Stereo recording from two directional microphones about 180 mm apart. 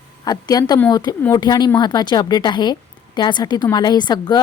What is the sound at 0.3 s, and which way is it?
Speech, 20° left (ahead or behind).